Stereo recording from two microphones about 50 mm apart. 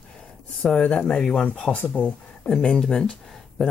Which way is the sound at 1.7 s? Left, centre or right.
Left.